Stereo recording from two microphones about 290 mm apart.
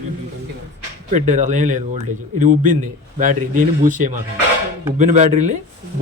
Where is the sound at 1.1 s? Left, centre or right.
Right.